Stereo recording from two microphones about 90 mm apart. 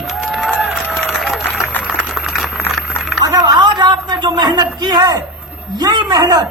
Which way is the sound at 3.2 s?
45° right (ahead or behind).